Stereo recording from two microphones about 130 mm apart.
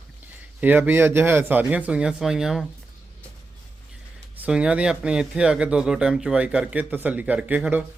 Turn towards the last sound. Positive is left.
turn(degrees=-10)  # may be behind; listen again after turning